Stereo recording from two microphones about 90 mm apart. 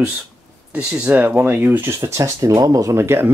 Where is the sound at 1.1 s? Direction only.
15° right (ahead or behind); by 3.0 s 40° right (ahead or behind).